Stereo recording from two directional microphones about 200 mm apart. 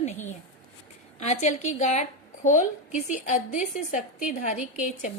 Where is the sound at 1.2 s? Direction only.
35° left (ahead or behind).